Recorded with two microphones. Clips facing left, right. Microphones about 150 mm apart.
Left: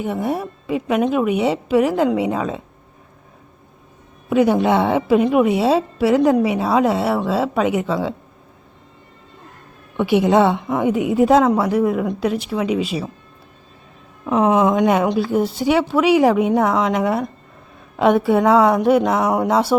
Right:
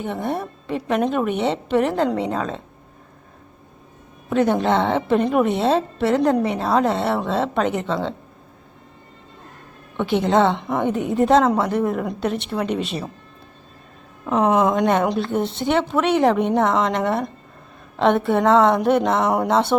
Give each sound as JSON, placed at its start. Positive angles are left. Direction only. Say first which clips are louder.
{"t": 0.0, "sound": "a woman's voice", "louder": "left 3 dB", "side_deg": 10}
{"t": 4.3, "sound": "a woman's voice", "louder": "left 3 dB", "side_deg": 5}
{"t": 10.0, "sound": "a woman's voice", "louder": "left 3 dB", "side_deg": 10}
{"t": 14.3, "sound": "a woman's voice", "louder": "left 2 dB", "side_deg": 0}